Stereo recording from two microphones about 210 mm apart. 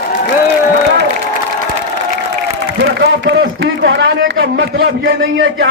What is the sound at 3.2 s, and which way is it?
A man's voice, 55° right (ahead or behind).